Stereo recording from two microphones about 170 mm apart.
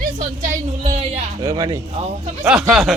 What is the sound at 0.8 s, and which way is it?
Speech, 40° right (ahead or behind).